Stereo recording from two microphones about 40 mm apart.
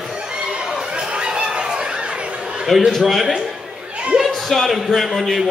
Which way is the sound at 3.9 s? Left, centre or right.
Right.